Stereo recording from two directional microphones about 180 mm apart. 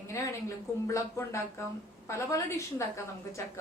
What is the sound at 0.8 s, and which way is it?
A woman's voice, 15° left (ahead or behind).